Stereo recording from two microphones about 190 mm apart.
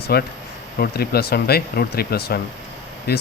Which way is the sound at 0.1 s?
55° left (ahead or behind).